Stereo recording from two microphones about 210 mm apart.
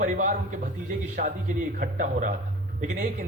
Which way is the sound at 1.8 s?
40° right (ahead or behind).